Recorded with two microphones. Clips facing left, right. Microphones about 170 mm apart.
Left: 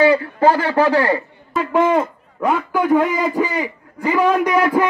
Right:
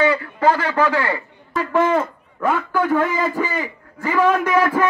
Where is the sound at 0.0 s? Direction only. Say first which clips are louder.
Left 4 dB; 35° left (ahead or behind).